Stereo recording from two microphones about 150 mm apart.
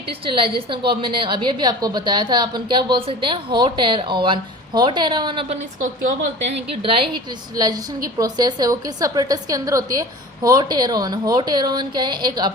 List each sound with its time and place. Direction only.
0.1 s a woman's voice: 35° right (ahead or behind)